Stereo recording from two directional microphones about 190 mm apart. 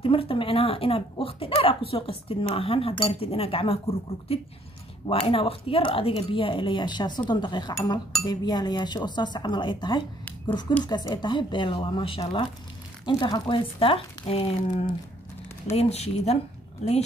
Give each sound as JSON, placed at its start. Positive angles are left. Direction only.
{"t": 0.0, "sound": "speech", "side_deg": 30}
{"t": 15.7, "sound": "speech", "side_deg": 35}